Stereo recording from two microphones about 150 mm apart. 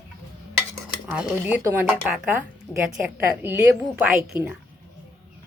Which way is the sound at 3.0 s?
15° right (ahead or behind).